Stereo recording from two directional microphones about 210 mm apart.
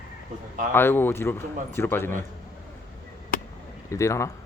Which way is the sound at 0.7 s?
10° left (ahead or behind).